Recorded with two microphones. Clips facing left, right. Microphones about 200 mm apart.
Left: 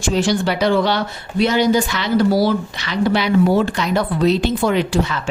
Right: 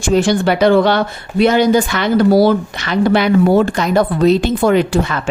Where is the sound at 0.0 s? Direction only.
55° right (ahead or behind).